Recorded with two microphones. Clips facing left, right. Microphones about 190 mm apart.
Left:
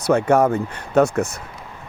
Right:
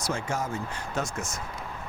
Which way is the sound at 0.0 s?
60° left (ahead or behind).